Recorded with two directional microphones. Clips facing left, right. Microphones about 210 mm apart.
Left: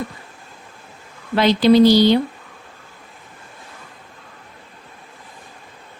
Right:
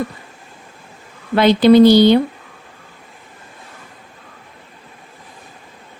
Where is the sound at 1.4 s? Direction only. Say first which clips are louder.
Right 3 dB; 55° right (ahead or behind).